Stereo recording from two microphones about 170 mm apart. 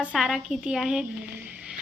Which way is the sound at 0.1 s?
5° right (ahead or behind).